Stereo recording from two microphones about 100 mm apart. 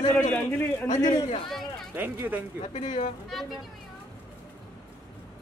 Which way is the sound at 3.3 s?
Centre (ahead or behind).